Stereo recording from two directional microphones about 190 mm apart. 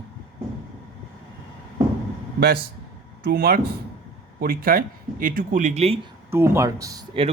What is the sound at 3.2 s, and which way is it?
Speech, 55° right (ahead or behind).